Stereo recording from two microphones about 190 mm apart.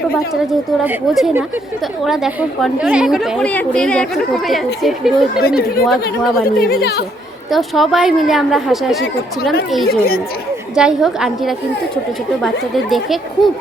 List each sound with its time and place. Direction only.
0.8 s a woman's voice: centre (ahead or behind)
5.4 s speech: 55° left (ahead or behind)
5.8 s a woman's voice: centre (ahead or behind)
6.4 s speech: 55° left (ahead or behind)
7.5 s a woman's voice: centre (ahead or behind)